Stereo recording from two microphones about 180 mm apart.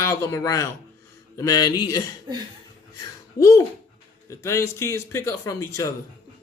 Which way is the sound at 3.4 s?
15° left (ahead or behind).